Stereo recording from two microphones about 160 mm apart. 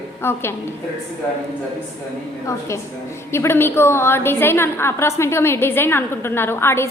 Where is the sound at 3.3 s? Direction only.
15° left (ahead or behind).